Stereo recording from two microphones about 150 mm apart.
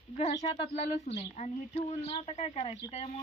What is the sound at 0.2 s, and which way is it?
Speech, 50° left (ahead or behind).